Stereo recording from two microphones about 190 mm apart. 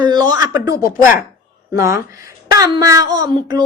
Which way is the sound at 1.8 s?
15° right (ahead or behind).